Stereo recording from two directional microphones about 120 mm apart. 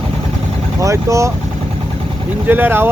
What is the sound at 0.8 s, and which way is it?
Speech, 25° right (ahead or behind).